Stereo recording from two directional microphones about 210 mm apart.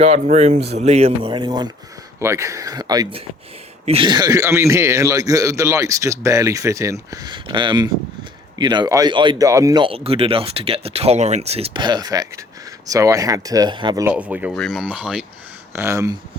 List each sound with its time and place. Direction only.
0.0 s a man's voice: 30° right (ahead or behind)
14.1 s a man's voice: 5° right (ahead or behind)